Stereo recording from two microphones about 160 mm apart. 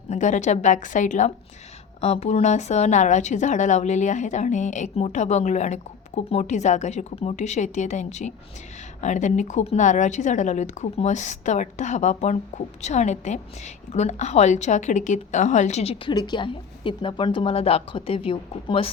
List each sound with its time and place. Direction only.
0.1 s a woman's voice: 50° left (ahead or behind)
2.0 s a woman's voice: 40° left (ahead or behind)
16.1 s a woman's voice: 30° left (ahead or behind)